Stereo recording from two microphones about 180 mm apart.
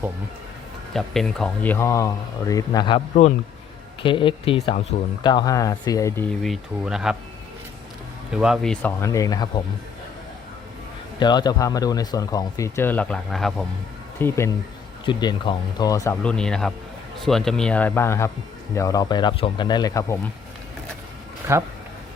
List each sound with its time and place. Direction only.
0.9 s speech: centre (ahead or behind); by 3.0 s 25° left (ahead or behind)
4.0 s speech: 30° left (ahead or behind)
6.4 s speech: centre (ahead or behind)
8.3 s speech: 5° right (ahead or behind)
9.0 s speech: 15° left (ahead or behind)
11.2 s speech: 25° left (ahead or behind); by 13.7 s centre (ahead or behind)
14.2 s speech: 15° left (ahead or behind)
15.0 s speech: 25° left (ahead or behind)
16.2 s speech: 5° left (ahead or behind)
21.4 s speech: 15° right (ahead or behind)